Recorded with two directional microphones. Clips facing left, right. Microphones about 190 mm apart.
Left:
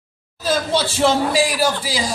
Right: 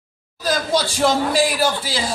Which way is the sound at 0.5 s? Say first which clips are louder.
Left 1 dB; 5° left (ahead or behind).